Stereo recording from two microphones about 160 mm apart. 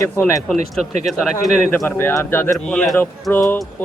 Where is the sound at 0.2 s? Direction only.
15° left (ahead or behind).